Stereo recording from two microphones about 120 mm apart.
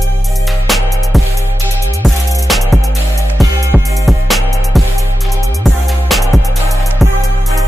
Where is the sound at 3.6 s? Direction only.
20° right (ahead or behind).